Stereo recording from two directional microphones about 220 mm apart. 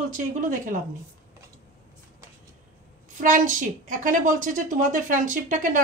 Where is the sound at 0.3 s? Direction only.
35° right (ahead or behind).